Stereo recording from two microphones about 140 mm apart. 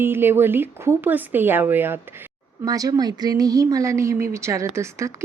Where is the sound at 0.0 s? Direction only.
15° right (ahead or behind).